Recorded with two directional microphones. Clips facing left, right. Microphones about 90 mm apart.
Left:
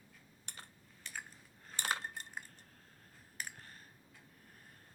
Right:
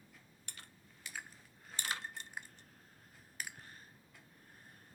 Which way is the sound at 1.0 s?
5° right (ahead or behind).